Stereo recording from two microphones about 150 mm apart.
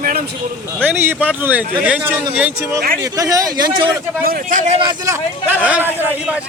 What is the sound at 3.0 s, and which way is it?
Speech, 20° right (ahead or behind).